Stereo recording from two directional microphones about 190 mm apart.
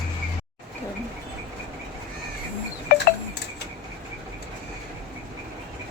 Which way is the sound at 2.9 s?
50° left (ahead or behind).